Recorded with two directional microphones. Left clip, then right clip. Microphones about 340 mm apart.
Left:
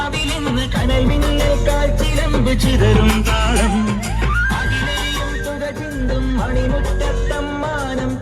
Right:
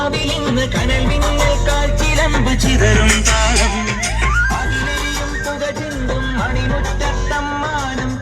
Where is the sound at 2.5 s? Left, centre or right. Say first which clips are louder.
Right 1 dB; centre.